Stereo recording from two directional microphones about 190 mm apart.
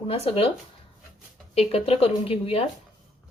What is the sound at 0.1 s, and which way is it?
Speech, 30° left (ahead or behind).